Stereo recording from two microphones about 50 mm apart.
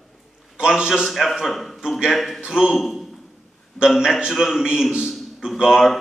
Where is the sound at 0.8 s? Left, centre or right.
Centre.